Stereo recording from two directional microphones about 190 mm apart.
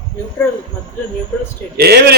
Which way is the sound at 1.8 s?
55° right (ahead or behind).